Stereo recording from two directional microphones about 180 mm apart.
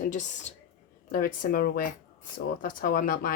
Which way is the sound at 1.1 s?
50° left (ahead or behind).